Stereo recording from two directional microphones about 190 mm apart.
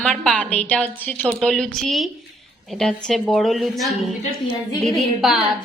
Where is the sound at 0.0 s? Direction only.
5° left (ahead or behind).